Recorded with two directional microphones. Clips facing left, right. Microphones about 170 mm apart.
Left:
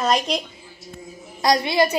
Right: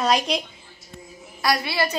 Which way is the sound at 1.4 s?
20° left (ahead or behind).